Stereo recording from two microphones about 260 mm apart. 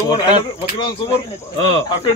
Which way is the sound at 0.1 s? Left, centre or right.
Centre.